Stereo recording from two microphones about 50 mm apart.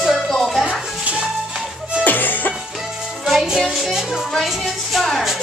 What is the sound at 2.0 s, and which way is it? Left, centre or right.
Cough, left.